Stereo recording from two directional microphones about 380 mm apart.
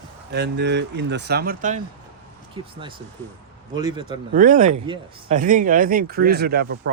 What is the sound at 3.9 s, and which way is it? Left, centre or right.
Speech, centre.